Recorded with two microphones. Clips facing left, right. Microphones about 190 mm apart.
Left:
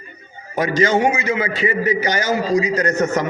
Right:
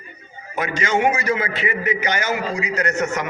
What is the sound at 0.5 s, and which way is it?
A man's voice, 35° left (ahead or behind).